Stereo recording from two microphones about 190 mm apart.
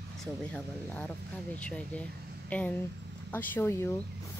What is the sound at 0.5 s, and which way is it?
Speech, 5° left (ahead or behind).